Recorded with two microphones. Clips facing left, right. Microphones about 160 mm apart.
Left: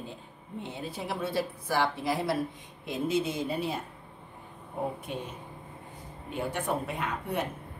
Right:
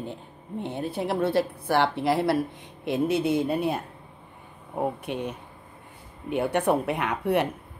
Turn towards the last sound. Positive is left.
turn(degrees=-70)  # may be behind; listen again after turning